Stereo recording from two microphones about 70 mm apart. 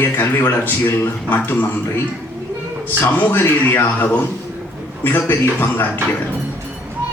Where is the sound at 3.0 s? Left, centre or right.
Left.